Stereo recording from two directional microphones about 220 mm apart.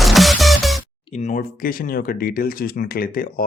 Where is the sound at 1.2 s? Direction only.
35° left (ahead or behind).